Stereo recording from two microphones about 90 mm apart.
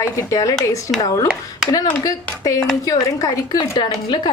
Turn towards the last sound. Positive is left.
turn(degrees=55)  # may be behind; listen again after turning